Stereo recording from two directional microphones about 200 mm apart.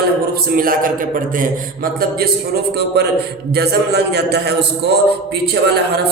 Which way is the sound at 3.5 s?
55° right (ahead or behind).